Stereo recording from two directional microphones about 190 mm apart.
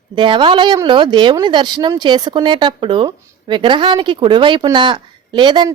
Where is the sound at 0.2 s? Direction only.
25° right (ahead or behind).